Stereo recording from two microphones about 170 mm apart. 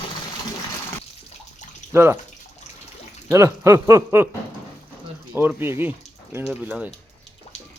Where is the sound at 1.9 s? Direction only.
15° right (ahead or behind).